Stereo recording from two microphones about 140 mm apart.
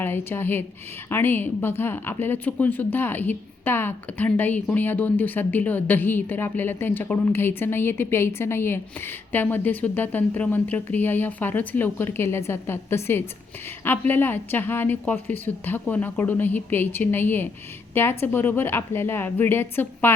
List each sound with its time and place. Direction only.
0.0 s speech: 15° left (ahead or behind)